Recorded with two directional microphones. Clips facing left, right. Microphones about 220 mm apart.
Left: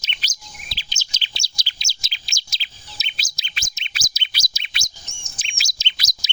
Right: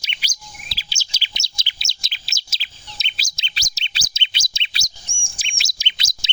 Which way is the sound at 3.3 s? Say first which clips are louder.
Right 1 dB; 25° right (ahead or behind).